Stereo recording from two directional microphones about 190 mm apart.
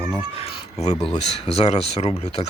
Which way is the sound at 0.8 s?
35° left (ahead or behind).